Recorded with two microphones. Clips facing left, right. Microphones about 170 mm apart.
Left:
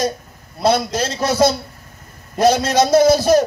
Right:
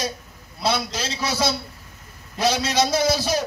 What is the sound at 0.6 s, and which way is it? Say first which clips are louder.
A man's voice: left 8 dB; 50° left (ahead or behind).